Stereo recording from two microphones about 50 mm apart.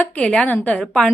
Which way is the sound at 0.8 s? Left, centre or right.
Centre.